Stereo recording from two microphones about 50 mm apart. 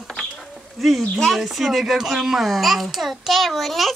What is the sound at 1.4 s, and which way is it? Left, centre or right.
A child's voice, centre.